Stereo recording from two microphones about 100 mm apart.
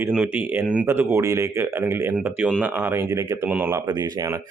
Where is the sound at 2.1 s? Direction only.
15° right (ahead or behind).